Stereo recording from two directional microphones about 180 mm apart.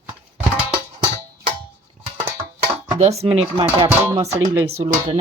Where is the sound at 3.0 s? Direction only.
35° right (ahead or behind).